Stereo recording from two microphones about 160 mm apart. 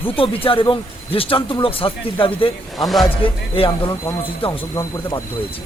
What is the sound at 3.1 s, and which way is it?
A man's voice, 35° left (ahead or behind).